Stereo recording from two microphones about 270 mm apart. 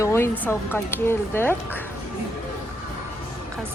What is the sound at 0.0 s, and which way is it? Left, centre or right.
Speech, centre.